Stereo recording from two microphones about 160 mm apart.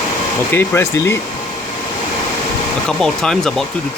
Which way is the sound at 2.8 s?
5° left (ahead or behind).